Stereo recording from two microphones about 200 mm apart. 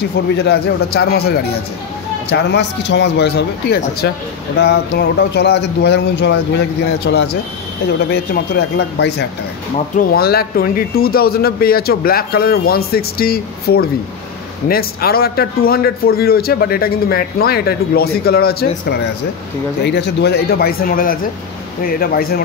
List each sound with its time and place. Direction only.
0.4 s a man's voice: 55° left (ahead or behind)